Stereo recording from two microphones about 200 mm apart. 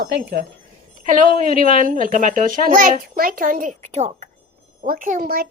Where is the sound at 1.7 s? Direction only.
45° right (ahead or behind).